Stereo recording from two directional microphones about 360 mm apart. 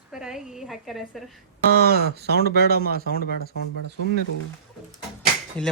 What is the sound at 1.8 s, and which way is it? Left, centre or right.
Speech, right.